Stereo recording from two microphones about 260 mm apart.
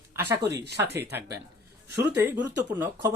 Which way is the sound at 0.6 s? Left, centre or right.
Right.